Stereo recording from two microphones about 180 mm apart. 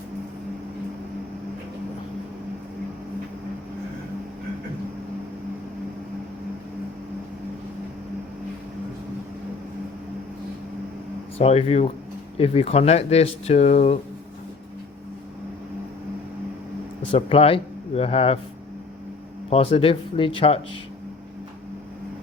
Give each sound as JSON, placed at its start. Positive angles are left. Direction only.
{"t": 11.3, "sound": "speech", "side_deg": 35}
{"t": 17.1, "sound": "speech", "side_deg": 30}
{"t": 19.5, "sound": "speech", "side_deg": 35}